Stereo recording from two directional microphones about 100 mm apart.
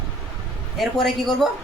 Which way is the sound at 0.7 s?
5° left (ahead or behind).